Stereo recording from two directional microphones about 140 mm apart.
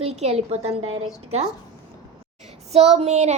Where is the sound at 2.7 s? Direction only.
50° right (ahead or behind).